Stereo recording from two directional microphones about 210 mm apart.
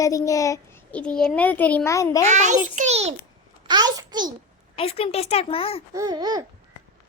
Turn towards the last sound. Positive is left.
turn(degrees=-20)  # may be behind; listen again after turning